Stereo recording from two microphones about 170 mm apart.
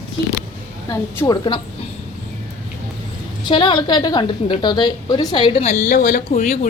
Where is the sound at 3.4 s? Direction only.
30° left (ahead or behind).